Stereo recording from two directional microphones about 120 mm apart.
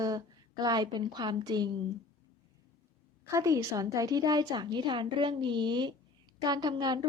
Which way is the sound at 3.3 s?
25° right (ahead or behind).